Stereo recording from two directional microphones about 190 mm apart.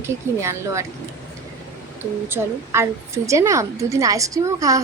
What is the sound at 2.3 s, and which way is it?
A woman's voice, 15° right (ahead or behind).